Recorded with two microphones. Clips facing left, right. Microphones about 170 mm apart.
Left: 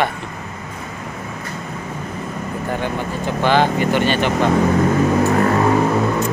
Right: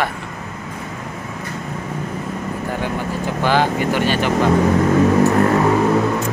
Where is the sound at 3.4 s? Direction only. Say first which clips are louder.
Left 2 dB; 10° right (ahead or behind).